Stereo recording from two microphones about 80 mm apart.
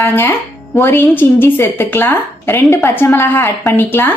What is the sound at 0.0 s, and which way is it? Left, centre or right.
A woman's voice, left.